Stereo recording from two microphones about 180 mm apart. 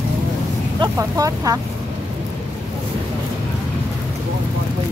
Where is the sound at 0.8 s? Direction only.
20° right (ahead or behind).